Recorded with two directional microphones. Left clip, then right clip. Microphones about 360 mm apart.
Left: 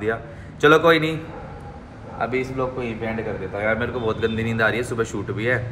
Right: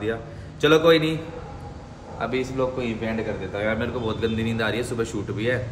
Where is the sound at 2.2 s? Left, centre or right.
Centre.